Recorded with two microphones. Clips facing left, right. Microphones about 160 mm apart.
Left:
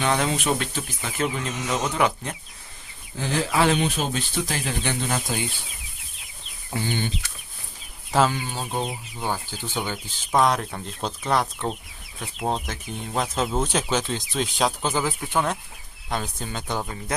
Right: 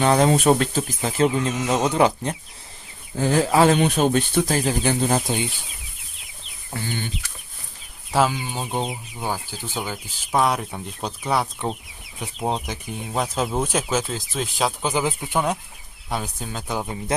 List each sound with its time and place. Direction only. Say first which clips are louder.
0.0 s speech: right 7 dB; 40° right (ahead or behind)
3.2 s speech: right 6 dB; 45° right (ahead or behind)
3.8 s speech: right 7 dB; 55° right (ahead or behind)
4.5 s speech: right 6 dB; 35° right (ahead or behind)
8.1 s speech: right 1 dB; 10° right (ahead or behind)
14.8 s speech: right 2 dB; 15° right (ahead or behind)
16.8 s speech: right 4 dB; 20° right (ahead or behind)